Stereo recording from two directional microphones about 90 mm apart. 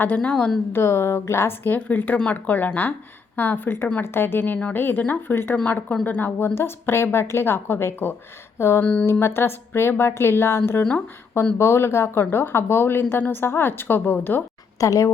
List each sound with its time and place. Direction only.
0.0 s a woman's voice: 15° left (ahead or behind)
0.7 s a woman's voice: 30° left (ahead or behind)
8.5 s a sound: 30° left (ahead or behind)
8.8 s a woman's voice: 15° left (ahead or behind)
9.1 s speech: 25° left (ahead or behind)
14.8 s a woman's voice: 35° left (ahead or behind)